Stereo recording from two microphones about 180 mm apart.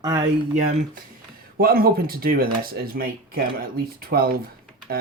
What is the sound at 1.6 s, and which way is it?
Speech, 55° right (ahead or behind).